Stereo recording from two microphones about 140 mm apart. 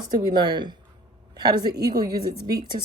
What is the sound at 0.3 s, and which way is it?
A woman's voice, 30° right (ahead or behind).